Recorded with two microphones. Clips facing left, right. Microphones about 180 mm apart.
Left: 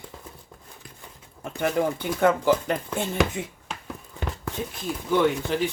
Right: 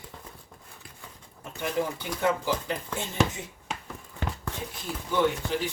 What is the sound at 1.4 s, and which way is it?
Speech, 55° left (ahead or behind).